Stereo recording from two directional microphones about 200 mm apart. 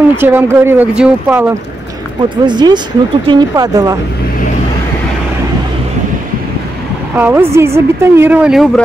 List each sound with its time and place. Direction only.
0.1 s speech: 10° right (ahead or behind)
2.2 s speech: 20° right (ahead or behind)
7.2 s speech: 10° right (ahead or behind)